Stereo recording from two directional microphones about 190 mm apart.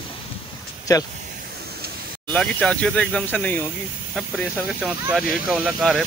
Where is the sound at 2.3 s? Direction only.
5° left (ahead or behind).